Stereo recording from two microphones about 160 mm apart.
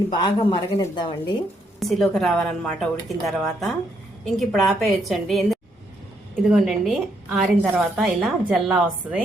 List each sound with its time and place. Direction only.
0.1 s a woman's voice: 30° left (ahead or behind)
1.8 s a woman's voice: centre (ahead or behind)